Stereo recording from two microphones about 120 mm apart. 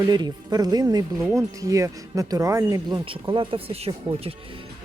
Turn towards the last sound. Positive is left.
turn(degrees=-50)  # may be behind; listen again after turning